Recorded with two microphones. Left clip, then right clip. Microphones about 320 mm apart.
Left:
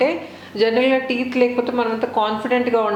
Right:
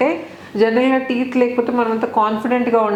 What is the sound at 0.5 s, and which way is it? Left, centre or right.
A woman's voice, right.